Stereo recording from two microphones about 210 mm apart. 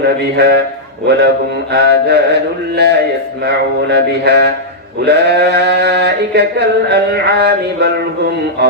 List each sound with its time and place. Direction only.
0.3 s bleat: 50° right (ahead or behind)